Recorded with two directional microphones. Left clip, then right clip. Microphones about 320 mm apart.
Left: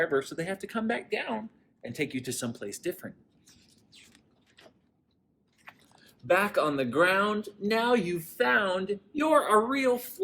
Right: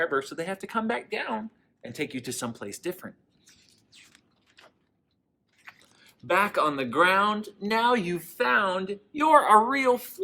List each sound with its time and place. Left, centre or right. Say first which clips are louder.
0.0 s speech: right 1 dB; centre
1.1 s a sound: right 1 dB; centre
5.6 s biting: right 2 dB; centre
6.0 s speech: right 1 dB; centre